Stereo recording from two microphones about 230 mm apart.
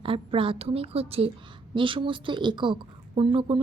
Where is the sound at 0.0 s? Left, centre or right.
Right.